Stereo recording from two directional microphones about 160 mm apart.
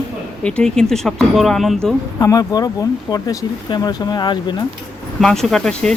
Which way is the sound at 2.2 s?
25° left (ahead or behind).